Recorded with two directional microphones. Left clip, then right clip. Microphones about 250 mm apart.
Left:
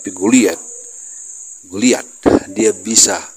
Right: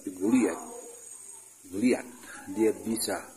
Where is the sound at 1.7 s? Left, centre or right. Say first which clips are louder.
Left 13 dB; left.